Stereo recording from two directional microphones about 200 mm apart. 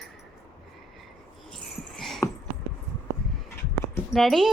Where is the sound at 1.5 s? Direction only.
Centre (ahead or behind).